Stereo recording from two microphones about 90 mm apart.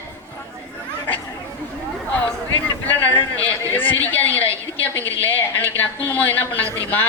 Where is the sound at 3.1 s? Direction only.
20° left (ahead or behind).